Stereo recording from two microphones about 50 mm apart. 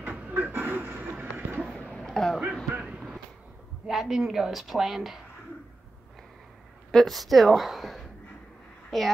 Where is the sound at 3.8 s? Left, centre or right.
Centre.